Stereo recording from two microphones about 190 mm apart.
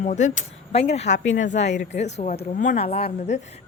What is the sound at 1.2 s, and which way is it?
Speech, 80° left.